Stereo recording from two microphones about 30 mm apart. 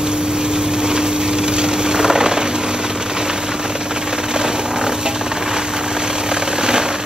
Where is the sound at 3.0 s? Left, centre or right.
Right.